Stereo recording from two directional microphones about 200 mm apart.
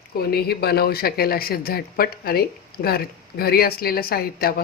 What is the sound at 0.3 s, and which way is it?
Speech, 50° left (ahead or behind).